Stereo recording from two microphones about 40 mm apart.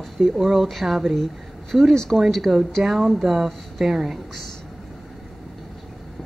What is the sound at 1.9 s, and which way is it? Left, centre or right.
Speech, centre.